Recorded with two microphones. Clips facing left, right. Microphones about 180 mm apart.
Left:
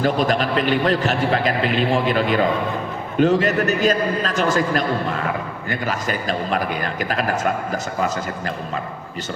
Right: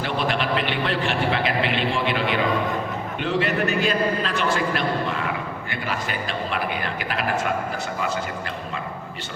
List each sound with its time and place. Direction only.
0.0 s a man's voice: 40° left (ahead or behind)